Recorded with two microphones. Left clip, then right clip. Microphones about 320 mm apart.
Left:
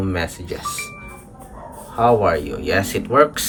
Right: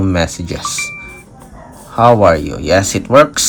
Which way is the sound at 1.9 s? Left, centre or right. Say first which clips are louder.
Right 7 dB; centre.